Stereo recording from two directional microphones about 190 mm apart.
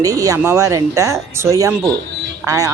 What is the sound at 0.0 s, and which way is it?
Speech, 20° right (ahead or behind).